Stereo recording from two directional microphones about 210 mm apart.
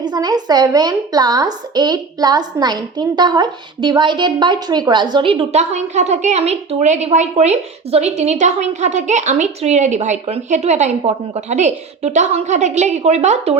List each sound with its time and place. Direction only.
0.0 s a woman's voice: 20° right (ahead or behind)